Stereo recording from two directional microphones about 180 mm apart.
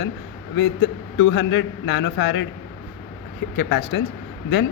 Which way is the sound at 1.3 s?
75° left (ahead or behind).